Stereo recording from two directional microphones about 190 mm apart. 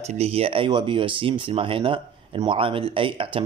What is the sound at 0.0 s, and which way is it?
Speech, 35° right (ahead or behind).